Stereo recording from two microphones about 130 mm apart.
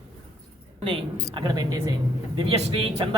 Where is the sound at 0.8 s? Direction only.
40° right (ahead or behind).